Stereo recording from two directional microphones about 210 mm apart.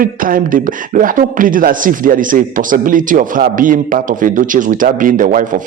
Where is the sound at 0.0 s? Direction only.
40° right (ahead or behind).